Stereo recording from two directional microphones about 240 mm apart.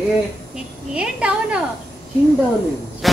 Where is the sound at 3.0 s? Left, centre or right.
Centre.